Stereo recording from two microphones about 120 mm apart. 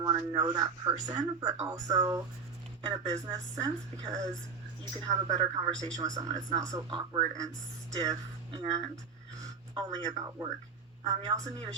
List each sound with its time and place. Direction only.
0.0 s speech: 35° right (ahead or behind)